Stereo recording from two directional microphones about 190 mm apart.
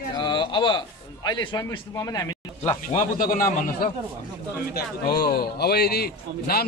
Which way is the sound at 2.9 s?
40° left (ahead or behind).